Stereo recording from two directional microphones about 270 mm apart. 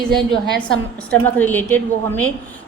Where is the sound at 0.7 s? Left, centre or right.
Centre.